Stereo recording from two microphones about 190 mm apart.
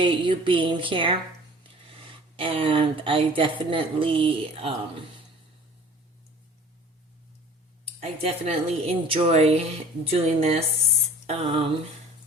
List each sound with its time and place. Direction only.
0.0 s speech: 25° right (ahead or behind)
2.3 s speech: 30° right (ahead or behind)
8.0 s a woman's voice: 30° right (ahead or behind)